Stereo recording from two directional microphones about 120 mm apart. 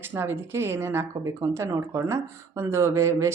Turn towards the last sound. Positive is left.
turn(degrees=-25)  # may be behind; listen again after turning